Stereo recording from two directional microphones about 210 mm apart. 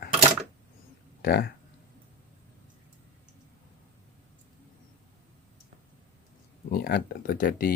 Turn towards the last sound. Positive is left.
turn(degrees=45)  # may be behind; listen again after turning